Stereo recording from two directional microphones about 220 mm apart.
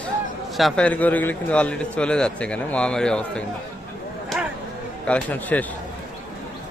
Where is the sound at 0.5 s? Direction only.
Centre (ahead or behind).